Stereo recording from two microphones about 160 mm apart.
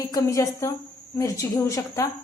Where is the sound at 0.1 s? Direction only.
20° left (ahead or behind).